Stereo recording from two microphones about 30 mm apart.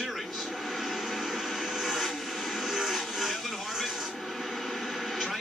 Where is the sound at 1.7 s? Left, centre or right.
Centre.